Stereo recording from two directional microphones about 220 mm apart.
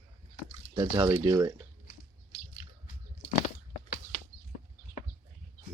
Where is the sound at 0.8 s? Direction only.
20° right (ahead or behind).